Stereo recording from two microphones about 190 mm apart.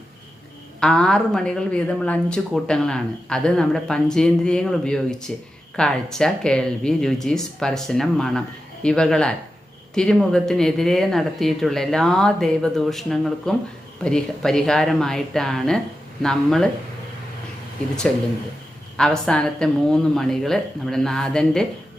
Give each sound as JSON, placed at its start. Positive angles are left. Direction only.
{"t": 0.8, "sound": "a woman's voice", "side_deg": 5}
{"t": 18.1, "sound": "a woman's voice", "side_deg": 5}